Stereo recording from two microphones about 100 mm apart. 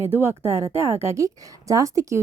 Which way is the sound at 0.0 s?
25° right (ahead or behind).